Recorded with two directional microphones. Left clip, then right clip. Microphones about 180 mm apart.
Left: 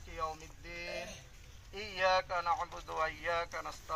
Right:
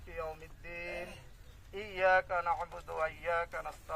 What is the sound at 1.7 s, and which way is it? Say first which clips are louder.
Speech: right 2 dB; 25° right (ahead or behind).